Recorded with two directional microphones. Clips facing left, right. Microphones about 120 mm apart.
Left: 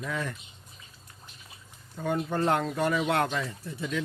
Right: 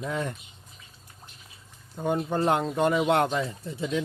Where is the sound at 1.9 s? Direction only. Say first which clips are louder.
Right 2 dB; 20° right (ahead or behind).